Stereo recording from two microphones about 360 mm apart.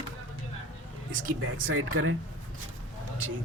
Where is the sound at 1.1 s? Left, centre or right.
Right.